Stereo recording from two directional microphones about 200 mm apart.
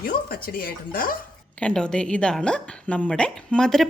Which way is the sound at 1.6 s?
5° left (ahead or behind).